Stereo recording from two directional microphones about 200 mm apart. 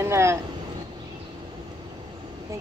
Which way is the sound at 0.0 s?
15° right (ahead or behind).